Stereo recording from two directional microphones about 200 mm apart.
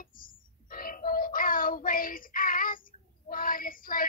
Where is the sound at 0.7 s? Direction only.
45° left (ahead or behind).